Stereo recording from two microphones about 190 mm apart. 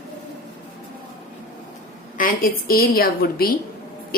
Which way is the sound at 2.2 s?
50° left (ahead or behind).